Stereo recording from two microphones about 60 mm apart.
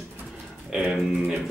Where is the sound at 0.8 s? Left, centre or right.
Centre.